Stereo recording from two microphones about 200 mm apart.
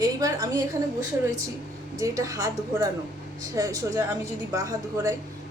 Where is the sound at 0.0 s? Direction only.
20° right (ahead or behind).